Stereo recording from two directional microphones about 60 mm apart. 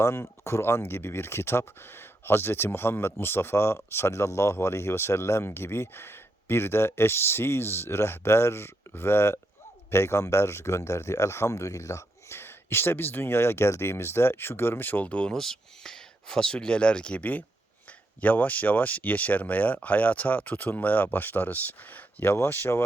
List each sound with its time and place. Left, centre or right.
0.0 s speech: left
12.3 s speech: left
15.0 s speech: centre; by 22.8 s left